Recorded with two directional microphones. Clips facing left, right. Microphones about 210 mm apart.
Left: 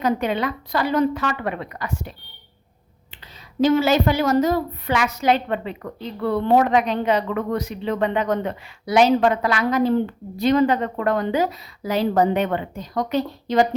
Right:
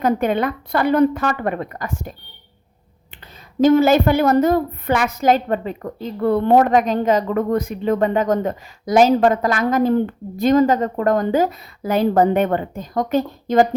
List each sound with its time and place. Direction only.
0.0 s a woman's voice: 50° right (ahead or behind)
3.6 s a woman's voice: 50° right (ahead or behind)